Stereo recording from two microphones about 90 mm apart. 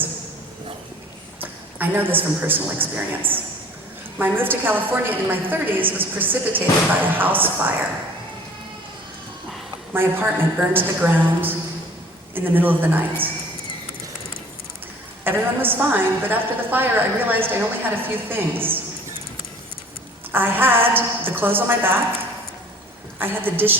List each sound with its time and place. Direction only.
1.4 s a woman's voice: 20° right (ahead or behind)
9.9 s a woman's voice: 25° right (ahead or behind)
15.2 s a woman's voice: 25° right (ahead or behind)
20.3 s a woman's voice: 20° right (ahead or behind)
23.2 s a woman's voice: 25° right (ahead or behind)